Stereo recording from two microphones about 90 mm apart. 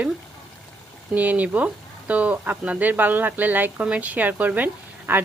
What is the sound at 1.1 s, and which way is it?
Speech, 20° right (ahead or behind).